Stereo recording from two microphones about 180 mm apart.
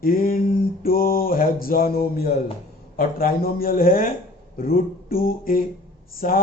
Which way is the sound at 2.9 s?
55° left (ahead or behind).